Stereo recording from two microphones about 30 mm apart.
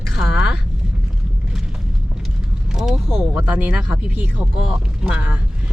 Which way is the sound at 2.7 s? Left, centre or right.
Centre.